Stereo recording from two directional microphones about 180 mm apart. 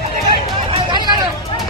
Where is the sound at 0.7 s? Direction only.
25° right (ahead or behind).